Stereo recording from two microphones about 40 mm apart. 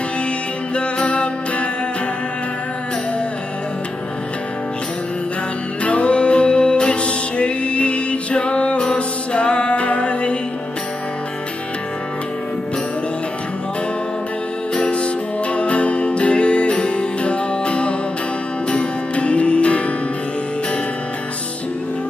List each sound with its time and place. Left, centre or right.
0.7 s music: left
5.9 s music: left
14.7 s music: left